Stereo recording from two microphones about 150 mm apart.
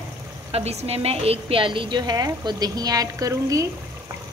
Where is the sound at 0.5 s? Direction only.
45° right (ahead or behind); by 3.6 s 20° right (ahead or behind).